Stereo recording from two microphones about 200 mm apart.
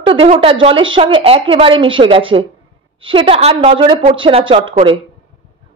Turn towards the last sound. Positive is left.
turn(degrees=-25)  # may be behind; listen again after turning